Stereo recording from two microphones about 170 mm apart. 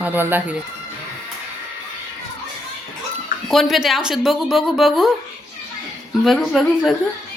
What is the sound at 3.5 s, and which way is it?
Speech, centre (ahead or behind).